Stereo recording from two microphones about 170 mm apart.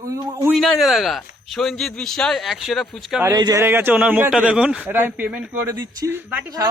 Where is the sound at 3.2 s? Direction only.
20° right (ahead or behind).